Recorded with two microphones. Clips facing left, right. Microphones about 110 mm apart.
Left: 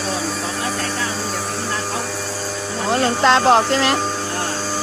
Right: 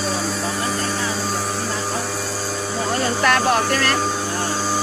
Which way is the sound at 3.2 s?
25° left (ahead or behind).